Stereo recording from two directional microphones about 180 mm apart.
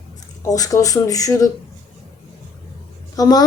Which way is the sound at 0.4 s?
20° left (ahead or behind).